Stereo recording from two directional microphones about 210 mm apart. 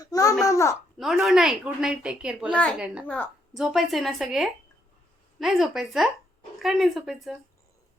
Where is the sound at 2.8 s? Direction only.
5° right (ahead or behind).